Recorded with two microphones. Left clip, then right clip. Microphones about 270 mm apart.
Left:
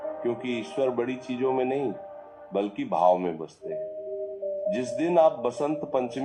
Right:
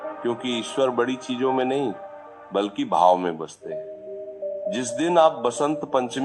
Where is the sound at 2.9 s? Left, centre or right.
Centre.